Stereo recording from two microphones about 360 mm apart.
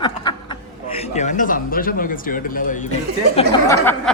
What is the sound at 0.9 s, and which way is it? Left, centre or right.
Speech, centre.